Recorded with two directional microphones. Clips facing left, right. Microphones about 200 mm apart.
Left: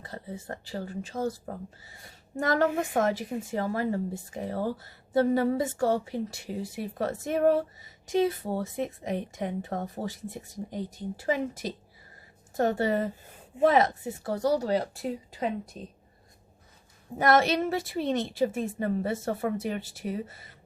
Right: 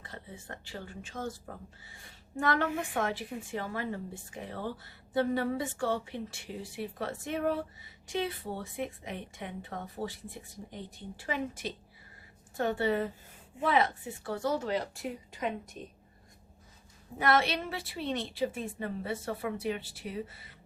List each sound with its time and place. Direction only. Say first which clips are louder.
0.0 s speech: left 7 dB; 40° left (ahead or behind)
17.2 s a woman's voice: left 5 dB; 45° left (ahead or behind)